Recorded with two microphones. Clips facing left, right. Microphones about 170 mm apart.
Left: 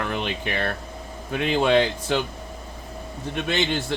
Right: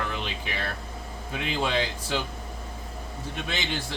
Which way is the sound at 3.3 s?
60° left (ahead or behind).